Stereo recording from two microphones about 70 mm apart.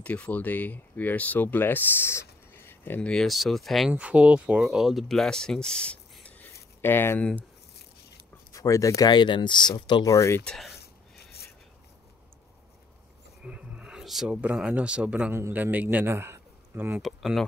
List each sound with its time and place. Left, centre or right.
0.0 s speech: centre
3.0 s speech: centre
3.9 s speech: centre
4.6 s speech: centre
6.2 s a sound: left
7.2 s speech: centre
8.5 s speech: left
9.0 s speech: left
10.0 s speech: left
13.4 s a sound: centre
14.3 s speech: centre
16.1 s a sound: right
17.0 s speech: centre